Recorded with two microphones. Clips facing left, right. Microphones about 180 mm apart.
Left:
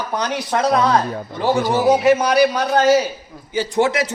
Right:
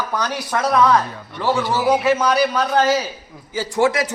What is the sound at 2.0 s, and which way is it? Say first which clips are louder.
Speech: left 3 dB; 15° left (ahead or behind).